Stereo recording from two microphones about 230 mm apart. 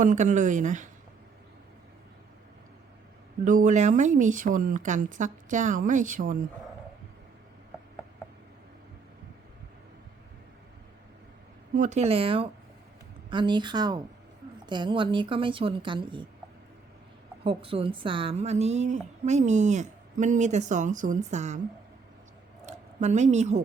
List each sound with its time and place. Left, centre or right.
0.0 s a woman's voice: right
3.4 s a woman's voice: right
11.7 s speech: right
17.4 s a woman's voice: right
22.6 s a woman's voice: right